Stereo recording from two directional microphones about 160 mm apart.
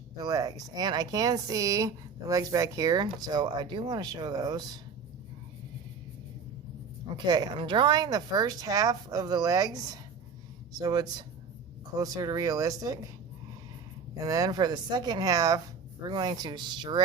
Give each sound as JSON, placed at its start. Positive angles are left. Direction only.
{"t": 0.2, "sound": "speech", "side_deg": -25}
{"t": 7.3, "sound": "speech", "side_deg": -25}
{"t": 14.3, "sound": "speech", "side_deg": -20}